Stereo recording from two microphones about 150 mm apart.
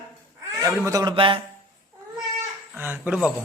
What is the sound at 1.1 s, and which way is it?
Speech, 35° right (ahead or behind).